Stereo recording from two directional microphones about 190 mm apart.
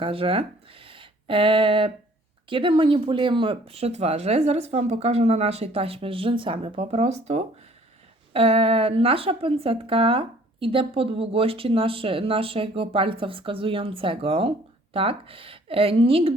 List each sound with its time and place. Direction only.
0.0 s speech: 30° right (ahead or behind)